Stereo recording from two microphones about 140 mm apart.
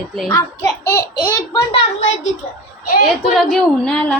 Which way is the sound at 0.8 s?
15° left (ahead or behind).